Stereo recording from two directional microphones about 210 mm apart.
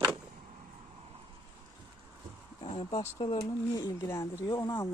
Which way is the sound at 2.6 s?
30° left (ahead or behind).